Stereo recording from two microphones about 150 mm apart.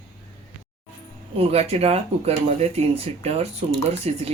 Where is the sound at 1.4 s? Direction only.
45° right (ahead or behind).